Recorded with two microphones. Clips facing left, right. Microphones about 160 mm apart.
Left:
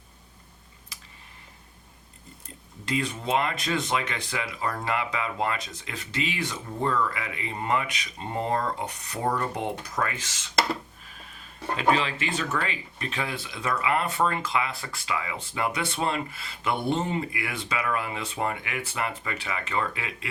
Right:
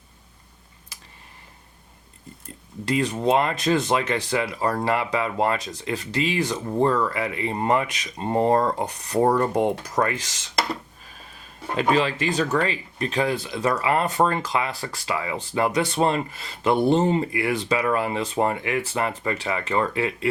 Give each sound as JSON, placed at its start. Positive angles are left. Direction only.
{"t": 2.8, "sound": "speech", "side_deg": -40}
{"t": 10.5, "sound": "a sound", "side_deg": 0}
{"t": 11.8, "sound": "speech", "side_deg": -40}